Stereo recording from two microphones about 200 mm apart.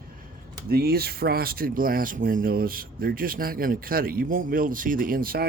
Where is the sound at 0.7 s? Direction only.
50° right (ahead or behind).